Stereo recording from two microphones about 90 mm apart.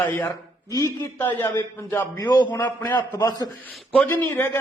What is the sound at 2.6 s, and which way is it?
Speech, 20° left (ahead or behind).